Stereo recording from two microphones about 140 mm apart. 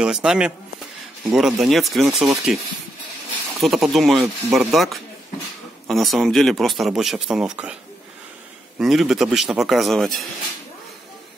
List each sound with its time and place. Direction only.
0.0 s speech: 5° right (ahead or behind)
8.7 s speech: centre (ahead or behind)